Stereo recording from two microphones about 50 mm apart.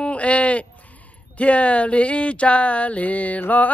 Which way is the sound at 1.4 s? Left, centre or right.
Left.